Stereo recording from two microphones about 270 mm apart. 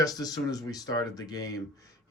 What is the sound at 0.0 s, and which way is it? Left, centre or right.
Speech, centre.